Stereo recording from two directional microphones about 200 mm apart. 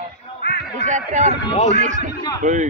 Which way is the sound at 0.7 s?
35° right (ahead or behind).